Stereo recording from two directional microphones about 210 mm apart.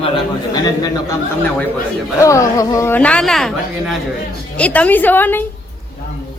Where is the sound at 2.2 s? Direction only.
15° left (ahead or behind).